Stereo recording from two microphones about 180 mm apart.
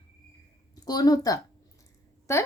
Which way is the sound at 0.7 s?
20° left (ahead or behind).